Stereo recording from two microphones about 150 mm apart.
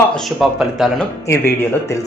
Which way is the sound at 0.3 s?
Centre (ahead or behind).